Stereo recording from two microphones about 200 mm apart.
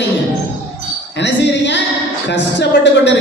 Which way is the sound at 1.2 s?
60° left (ahead or behind).